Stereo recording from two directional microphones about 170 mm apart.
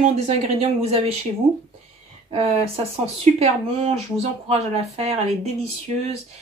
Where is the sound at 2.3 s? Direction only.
35° right (ahead or behind).